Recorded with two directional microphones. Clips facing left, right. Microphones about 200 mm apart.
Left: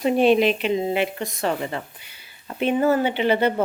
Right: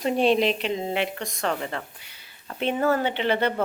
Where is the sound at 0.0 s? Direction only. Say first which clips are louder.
Left 4 dB; 5° left (ahead or behind).